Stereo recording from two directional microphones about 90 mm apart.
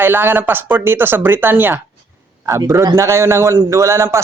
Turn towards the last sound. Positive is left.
turn(degrees=-30)  # may be behind; listen again after turning